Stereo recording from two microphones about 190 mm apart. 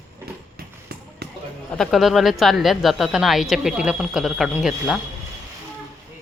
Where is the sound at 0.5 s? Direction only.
55° right (ahead or behind).